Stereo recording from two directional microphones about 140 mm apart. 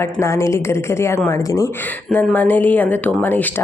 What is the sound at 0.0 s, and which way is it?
A woman's voice, 20° left (ahead or behind).